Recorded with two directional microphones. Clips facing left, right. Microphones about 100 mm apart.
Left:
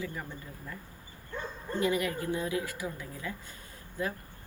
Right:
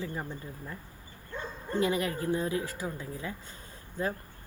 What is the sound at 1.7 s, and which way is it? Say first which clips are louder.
Speech: right 1 dB; 25° right (ahead or behind).